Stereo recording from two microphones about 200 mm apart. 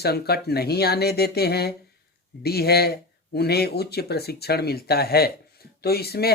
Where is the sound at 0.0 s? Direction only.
55° left (ahead or behind).